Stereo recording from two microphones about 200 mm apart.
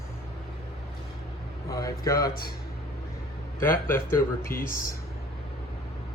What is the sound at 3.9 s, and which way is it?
Speech, 15° left (ahead or behind).